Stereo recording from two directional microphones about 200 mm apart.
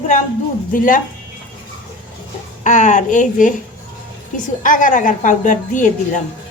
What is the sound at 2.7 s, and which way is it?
Speech, 40° left (ahead or behind).